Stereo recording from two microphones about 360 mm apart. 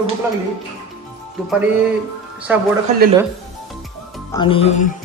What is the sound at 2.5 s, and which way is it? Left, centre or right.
Speech, centre.